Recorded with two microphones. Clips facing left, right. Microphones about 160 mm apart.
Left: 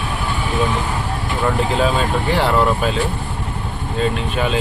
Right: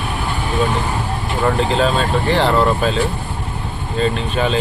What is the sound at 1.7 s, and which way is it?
Speech, 10° left (ahead or behind).